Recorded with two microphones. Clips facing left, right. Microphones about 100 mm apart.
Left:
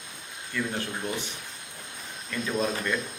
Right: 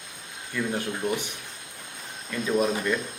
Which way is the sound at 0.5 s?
15° right (ahead or behind).